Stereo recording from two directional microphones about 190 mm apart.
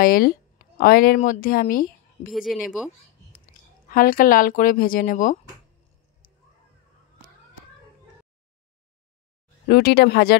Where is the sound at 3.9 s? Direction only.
45° left (ahead or behind).